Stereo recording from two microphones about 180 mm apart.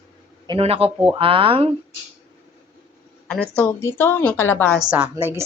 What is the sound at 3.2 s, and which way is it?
Speech, 5° left (ahead or behind).